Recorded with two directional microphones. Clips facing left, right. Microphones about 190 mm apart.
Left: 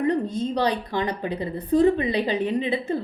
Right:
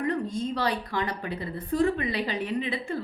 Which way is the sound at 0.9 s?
20° left (ahead or behind).